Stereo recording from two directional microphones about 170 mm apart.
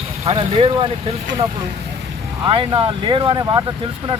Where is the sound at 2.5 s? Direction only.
30° right (ahead or behind).